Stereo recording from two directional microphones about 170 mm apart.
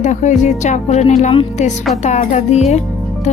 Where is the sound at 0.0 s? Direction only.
45° left (ahead or behind).